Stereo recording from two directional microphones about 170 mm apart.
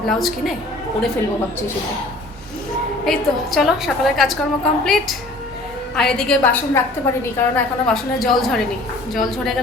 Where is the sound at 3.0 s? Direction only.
Centre (ahead or behind).